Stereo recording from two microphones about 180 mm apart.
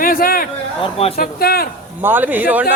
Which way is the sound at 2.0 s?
10° right (ahead or behind).